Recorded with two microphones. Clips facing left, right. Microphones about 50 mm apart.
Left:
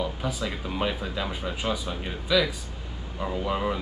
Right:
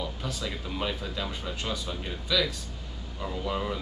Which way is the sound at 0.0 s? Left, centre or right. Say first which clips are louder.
Left 5 dB; centre.